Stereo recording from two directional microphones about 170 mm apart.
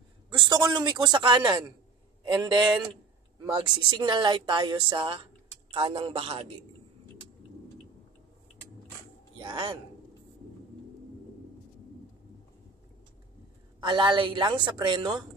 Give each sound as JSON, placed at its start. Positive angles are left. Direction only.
{"t": 0.3, "sound": "a sound", "side_deg": -25}
{"t": 0.7, "sound": "speech", "side_deg": -25}
{"t": 9.4, "sound": "speech", "side_deg": -30}
{"t": 13.7, "sound": "speech", "side_deg": -25}